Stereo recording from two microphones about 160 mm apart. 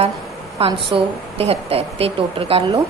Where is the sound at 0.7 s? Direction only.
35° right (ahead or behind).